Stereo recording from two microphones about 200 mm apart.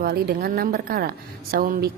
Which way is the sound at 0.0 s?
50° right (ahead or behind).